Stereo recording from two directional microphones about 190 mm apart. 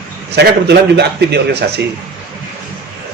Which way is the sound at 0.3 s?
60° right (ahead or behind).